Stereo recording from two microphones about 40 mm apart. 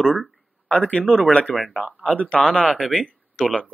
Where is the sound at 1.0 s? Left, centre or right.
Centre.